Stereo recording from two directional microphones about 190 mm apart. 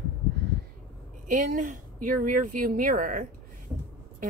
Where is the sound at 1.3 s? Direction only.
40° right (ahead or behind).